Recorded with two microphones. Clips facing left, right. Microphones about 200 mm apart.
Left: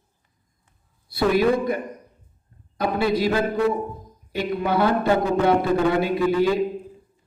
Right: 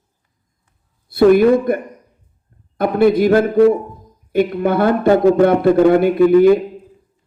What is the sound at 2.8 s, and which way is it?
A man's voice, 55° right (ahead or behind).